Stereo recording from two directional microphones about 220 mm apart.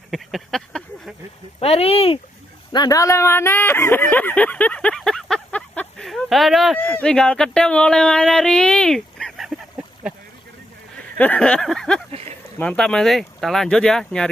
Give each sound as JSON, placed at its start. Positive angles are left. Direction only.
{"t": 0.1, "sound": "speech", "side_deg": 0}
{"t": 1.6, "sound": "speech", "side_deg": 25}
{"t": 11.1, "sound": "speech", "side_deg": 5}